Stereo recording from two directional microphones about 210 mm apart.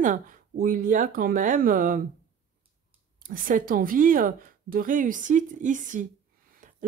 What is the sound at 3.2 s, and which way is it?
Speech, 40° right (ahead or behind).